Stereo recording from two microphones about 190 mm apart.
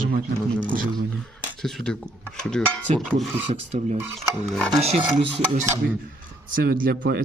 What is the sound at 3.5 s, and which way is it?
Speech, 40° right (ahead or behind).